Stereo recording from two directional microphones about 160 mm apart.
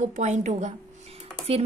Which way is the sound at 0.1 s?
50° right (ahead or behind).